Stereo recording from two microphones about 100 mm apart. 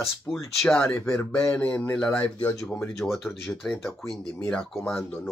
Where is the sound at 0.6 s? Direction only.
10° left (ahead or behind).